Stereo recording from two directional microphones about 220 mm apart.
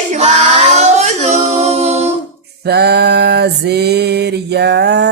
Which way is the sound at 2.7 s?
50° right (ahead or behind).